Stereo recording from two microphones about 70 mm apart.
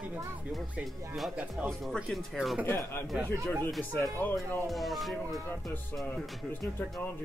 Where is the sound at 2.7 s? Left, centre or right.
Left.